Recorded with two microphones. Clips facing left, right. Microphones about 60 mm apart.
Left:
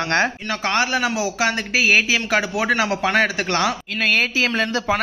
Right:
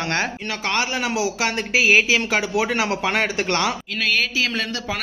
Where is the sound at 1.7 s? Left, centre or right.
Right.